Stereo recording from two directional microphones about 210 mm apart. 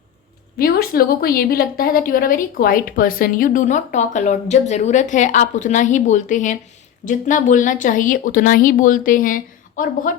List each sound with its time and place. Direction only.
0.6 s a woman's voice: 45° left (ahead or behind)